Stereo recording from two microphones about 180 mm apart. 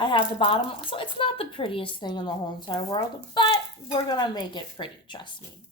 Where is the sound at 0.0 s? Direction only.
30° left (ahead or behind).